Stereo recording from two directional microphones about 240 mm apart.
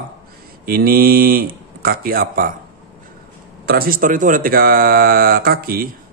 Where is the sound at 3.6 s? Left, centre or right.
Right.